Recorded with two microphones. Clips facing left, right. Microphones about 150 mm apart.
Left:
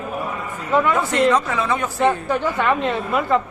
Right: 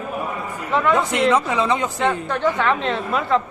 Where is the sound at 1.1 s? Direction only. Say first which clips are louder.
Left 1 dB; 10° right (ahead or behind).